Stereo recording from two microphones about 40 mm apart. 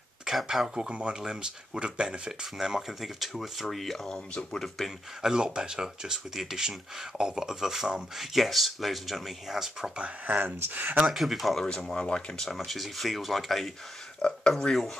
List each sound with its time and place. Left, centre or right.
0.5 s speech: centre
0.8 s speech: right
3.0 s speech: centre
5.2 s speech: centre
9.9 s speech: right
10.4 s speech: right
11.1 s speech: centre
11.5 s speech: centre
12.5 s speech: centre
14.2 s speech: left